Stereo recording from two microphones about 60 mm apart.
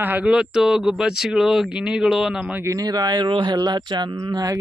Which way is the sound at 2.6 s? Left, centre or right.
Right.